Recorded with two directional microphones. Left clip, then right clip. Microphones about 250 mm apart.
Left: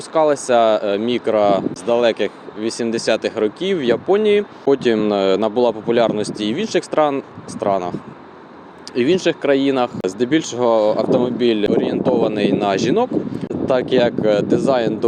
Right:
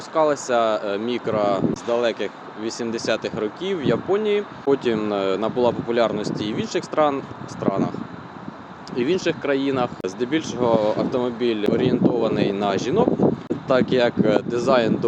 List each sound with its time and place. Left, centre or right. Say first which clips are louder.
0.1 s speech: left 5 dB; left
9.0 s speech: left 5 dB; left